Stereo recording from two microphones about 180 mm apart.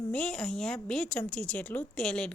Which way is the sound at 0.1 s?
5° left (ahead or behind).